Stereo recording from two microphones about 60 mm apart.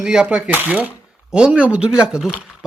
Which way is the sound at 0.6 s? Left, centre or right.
Right.